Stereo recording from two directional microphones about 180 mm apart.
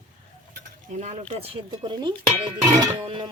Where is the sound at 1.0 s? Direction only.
35° right (ahead or behind).